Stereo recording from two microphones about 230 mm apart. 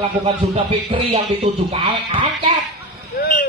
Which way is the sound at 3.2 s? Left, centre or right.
Left.